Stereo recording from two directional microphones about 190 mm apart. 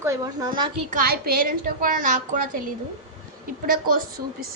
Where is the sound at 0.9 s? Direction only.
50° right (ahead or behind).